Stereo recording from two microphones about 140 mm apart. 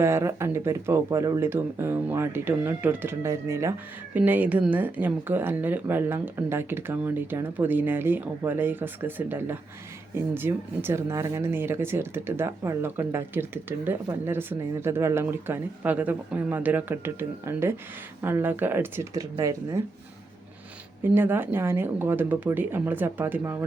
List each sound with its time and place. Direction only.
0.0 s speech: 20° right (ahead or behind)
21.0 s speech: 15° right (ahead or behind)